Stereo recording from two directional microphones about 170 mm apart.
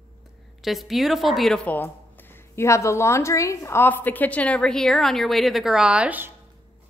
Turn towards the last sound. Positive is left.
turn(degrees=-10)  # may be behind; listen again after turning